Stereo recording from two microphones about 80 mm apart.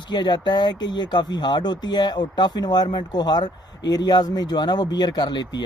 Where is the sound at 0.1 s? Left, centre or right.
Left.